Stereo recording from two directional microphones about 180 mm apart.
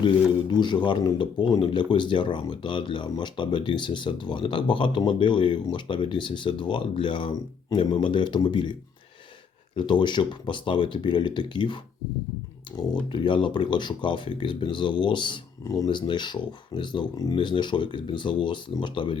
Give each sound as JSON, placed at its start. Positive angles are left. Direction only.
{"t": 0.0, "sound": "speech", "side_deg": 25}
{"t": 9.7, "sound": "speech", "side_deg": 25}